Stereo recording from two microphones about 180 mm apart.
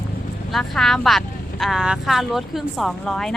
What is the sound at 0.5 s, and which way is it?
Speech, centre (ahead or behind).